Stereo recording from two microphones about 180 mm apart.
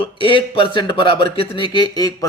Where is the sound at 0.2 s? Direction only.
30° left (ahead or behind).